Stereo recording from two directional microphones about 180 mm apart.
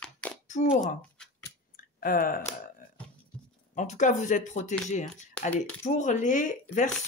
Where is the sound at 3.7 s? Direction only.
40° left (ahead or behind).